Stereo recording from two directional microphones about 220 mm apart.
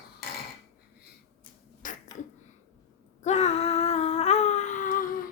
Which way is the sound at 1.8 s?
35° left (ahead or behind).